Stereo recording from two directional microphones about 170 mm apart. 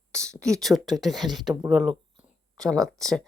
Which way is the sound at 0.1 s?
20° right (ahead or behind).